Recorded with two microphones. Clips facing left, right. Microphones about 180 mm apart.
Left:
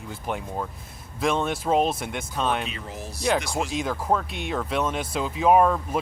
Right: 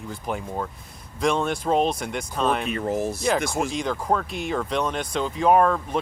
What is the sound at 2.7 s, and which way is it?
Speech, 50° right (ahead or behind).